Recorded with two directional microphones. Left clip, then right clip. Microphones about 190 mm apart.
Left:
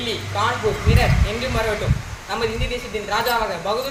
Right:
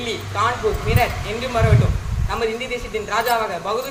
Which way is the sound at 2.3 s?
5° left (ahead or behind).